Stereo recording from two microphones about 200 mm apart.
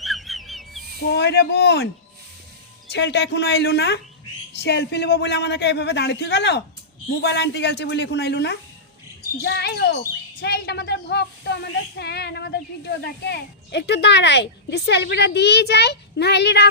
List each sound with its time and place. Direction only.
0.0 s a sound: centre (ahead or behind)
1.0 s speech: 55° left (ahead or behind)
2.9 s speech: 60° left (ahead or behind)